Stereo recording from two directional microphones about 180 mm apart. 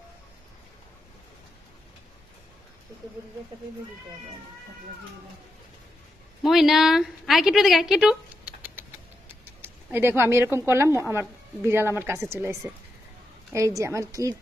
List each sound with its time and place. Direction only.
6.4 s a woman's voice: centre (ahead or behind); by 14.4 s 20° right (ahead or behind)